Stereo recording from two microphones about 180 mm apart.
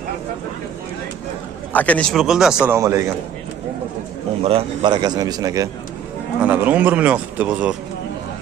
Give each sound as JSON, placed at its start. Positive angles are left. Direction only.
{"t": 1.7, "sound": "a man's voice", "side_deg": 10}
{"t": 2.7, "sound": "speech", "side_deg": -15}
{"t": 4.4, "sound": "a man's voice", "side_deg": -30}
{"t": 6.4, "sound": "speech", "side_deg": -10}